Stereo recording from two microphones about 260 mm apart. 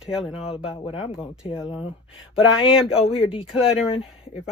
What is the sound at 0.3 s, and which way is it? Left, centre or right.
Speech, left.